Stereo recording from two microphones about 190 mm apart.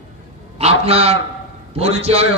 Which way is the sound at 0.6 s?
30° right (ahead or behind).